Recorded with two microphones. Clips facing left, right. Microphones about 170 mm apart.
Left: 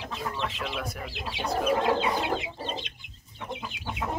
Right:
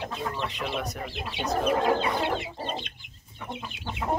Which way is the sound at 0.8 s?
5° left (ahead or behind).